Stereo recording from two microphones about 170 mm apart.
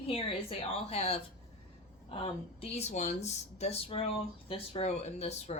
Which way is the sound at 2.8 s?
40° left (ahead or behind).